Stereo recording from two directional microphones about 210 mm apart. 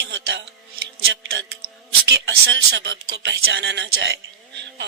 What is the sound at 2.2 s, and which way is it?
Speech, 55° right (ahead or behind).